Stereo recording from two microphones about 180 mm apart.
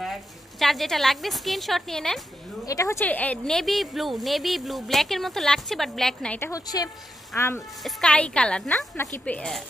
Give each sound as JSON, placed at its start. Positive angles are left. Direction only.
{"t": 0.0, "sound": "a woman's voice", "side_deg": 0}
{"t": 2.6, "sound": "a woman's voice", "side_deg": 20}
{"t": 6.5, "sound": "a woman's voice", "side_deg": 20}
{"t": 7.8, "sound": "a woman's voice", "side_deg": 5}